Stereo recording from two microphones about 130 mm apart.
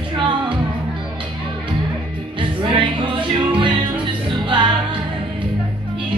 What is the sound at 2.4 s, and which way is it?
Music, 40° right (ahead or behind).